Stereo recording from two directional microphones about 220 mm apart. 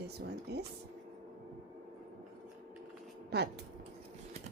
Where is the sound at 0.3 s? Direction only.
50° right (ahead or behind).